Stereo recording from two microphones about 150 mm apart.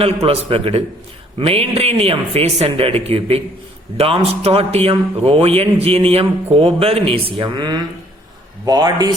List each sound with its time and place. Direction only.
0.3 s a man's voice: 40° right (ahead or behind)